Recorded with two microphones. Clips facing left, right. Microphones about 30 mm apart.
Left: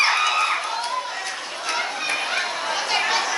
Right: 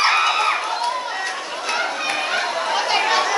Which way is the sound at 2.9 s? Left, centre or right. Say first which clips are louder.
Right 3 dB; centre.